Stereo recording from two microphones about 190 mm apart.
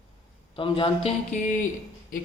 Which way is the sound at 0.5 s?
25° left (ahead or behind).